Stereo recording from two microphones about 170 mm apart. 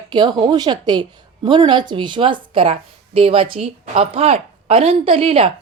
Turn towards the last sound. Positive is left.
turn(degrees=-35)  # may be behind; listen again after turning